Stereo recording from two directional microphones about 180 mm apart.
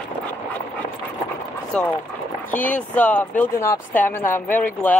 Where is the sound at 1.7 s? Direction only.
5° left (ahead or behind).